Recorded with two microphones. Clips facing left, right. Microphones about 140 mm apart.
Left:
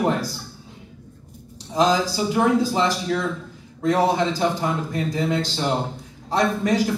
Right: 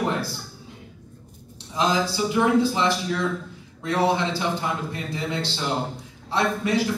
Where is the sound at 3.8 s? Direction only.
40° left (ahead or behind).